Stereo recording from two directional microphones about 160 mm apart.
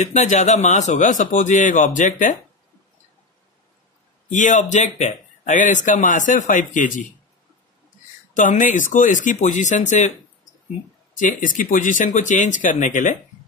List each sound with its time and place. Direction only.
0.0 s speech: 45° left (ahead or behind)
4.3 s speech: 50° left (ahead or behind)
8.4 s speech: 55° left (ahead or behind)
11.1 s speech: 55° left (ahead or behind)